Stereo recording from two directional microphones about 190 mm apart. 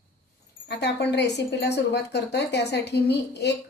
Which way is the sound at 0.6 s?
60° left (ahead or behind).